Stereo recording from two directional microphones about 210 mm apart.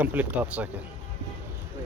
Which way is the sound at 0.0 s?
10° right (ahead or behind).